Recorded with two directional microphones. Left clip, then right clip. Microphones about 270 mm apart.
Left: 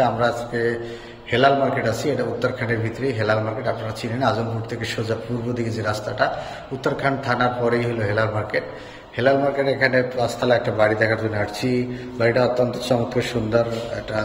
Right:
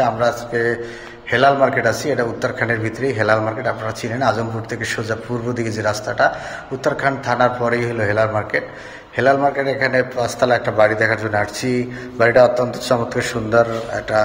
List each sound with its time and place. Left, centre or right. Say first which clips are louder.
0.0 s a man's voice: right 2 dB; centre